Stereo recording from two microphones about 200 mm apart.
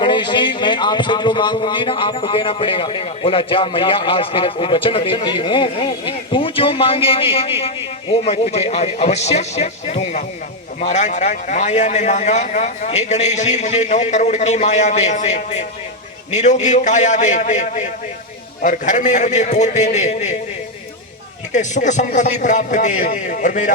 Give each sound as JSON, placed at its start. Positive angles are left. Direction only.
{"t": 0.0, "sound": "a man's voice", "side_deg": 25}
{"t": 21.5, "sound": "a man's voice", "side_deg": 35}